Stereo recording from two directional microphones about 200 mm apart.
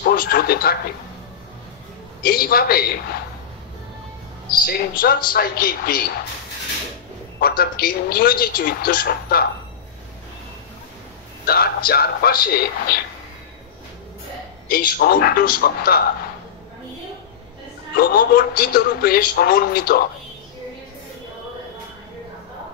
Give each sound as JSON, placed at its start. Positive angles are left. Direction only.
{"t": 0.0, "sound": "speech", "side_deg": 50}
{"t": 2.2, "sound": "a woman's voice", "side_deg": 50}
{"t": 4.5, "sound": "a woman's voice", "side_deg": 50}
{"t": 7.3, "sound": "a woman's voice", "side_deg": 50}
{"t": 11.4, "sound": "a woman's voice", "side_deg": 50}
{"t": 14.7, "sound": "a woman's voice", "side_deg": 50}
{"t": 17.9, "sound": "a woman's voice", "side_deg": 45}